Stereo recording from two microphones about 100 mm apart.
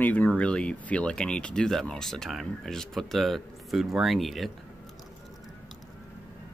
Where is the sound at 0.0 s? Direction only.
20° left (ahead or behind); by 4.5 s centre (ahead or behind).